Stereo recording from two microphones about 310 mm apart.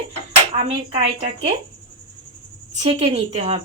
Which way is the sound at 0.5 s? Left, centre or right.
Centre.